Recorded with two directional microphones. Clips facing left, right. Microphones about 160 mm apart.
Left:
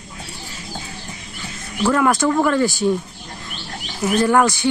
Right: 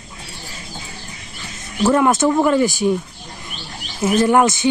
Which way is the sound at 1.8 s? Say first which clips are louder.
Right 2 dB; 25° right (ahead or behind).